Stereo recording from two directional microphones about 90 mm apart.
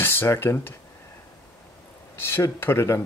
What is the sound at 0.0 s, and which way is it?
Speech, 25° left (ahead or behind).